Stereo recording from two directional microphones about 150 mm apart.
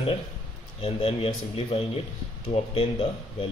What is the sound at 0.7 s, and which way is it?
A man's voice, 40° left (ahead or behind).